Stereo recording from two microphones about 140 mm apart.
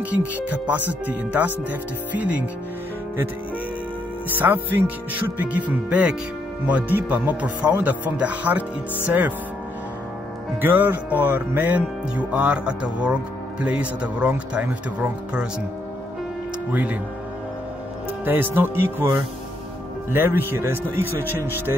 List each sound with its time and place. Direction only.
0.1 s music: 10° right (ahead or behind)
4.4 s music: 15° right (ahead or behind)
10.6 s music: 15° right (ahead or behind)
16.7 s music: 10° right (ahead or behind)
18.2 s music: 15° right (ahead or behind)